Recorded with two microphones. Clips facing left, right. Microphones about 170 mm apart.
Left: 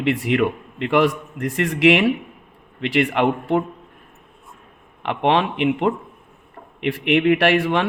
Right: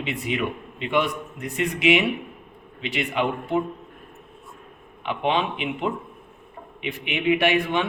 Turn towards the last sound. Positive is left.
turn(degrees=85)